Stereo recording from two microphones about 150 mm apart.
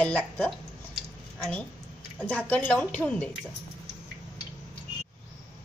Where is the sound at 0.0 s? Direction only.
10° left (ahead or behind).